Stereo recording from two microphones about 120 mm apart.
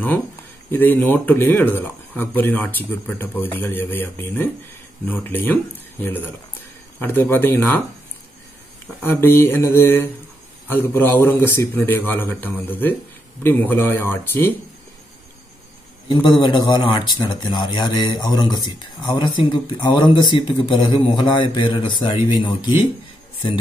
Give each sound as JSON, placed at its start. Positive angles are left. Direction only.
{"t": 0.7, "sound": "speech", "side_deg": 15}
{"t": 7.0, "sound": "speech", "side_deg": 15}
{"t": 9.0, "sound": "mantra", "side_deg": 20}
{"t": 10.7, "sound": "speech", "side_deg": 20}
{"t": 16.1, "sound": "speech", "side_deg": 40}